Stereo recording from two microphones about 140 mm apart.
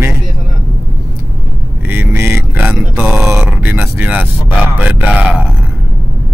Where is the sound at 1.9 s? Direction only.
15° right (ahead or behind).